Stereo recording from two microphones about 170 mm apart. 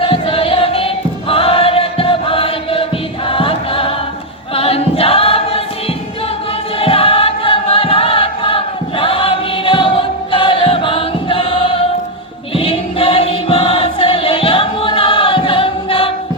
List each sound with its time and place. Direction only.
0.0 s choir: 30° left (ahead or behind)
6.7 s choir: 35° left (ahead or behind)